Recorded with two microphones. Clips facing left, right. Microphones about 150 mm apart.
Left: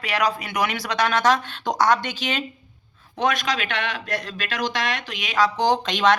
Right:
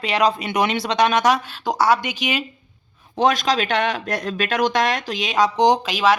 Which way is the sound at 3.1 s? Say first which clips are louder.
Right 5 dB; 35° right (ahead or behind).